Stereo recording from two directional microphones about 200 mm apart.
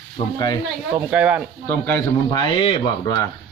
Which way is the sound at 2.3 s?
25° left (ahead or behind).